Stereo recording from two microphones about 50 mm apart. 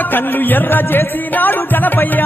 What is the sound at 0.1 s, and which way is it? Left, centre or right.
Music, left.